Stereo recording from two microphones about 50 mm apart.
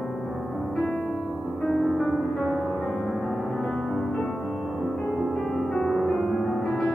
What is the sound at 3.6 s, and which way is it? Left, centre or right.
Music, centre.